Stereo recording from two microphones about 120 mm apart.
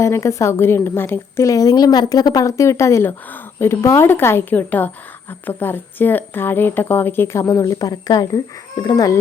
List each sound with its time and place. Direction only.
0.0 s a woman's voice: 25° left (ahead or behind)